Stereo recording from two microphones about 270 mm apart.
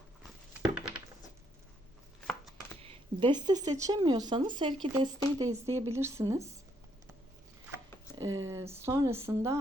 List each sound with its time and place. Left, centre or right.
0.2 s a sound: centre
2.8 s speech: centre
8.2 s speech: centre